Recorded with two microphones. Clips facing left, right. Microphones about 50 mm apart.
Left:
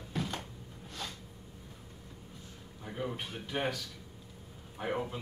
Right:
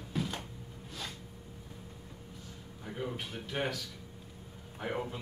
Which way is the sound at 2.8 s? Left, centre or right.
Centre.